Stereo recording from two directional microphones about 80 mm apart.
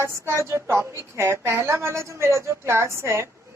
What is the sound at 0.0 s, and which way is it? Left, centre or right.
Speech, right.